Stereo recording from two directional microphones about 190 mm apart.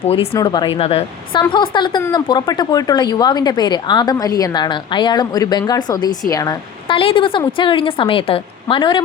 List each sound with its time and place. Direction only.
0.0 s a woman's voice: 30° left (ahead or behind)